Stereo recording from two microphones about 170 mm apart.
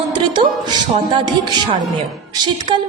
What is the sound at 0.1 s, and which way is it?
A woman's voice, 30° right (ahead or behind).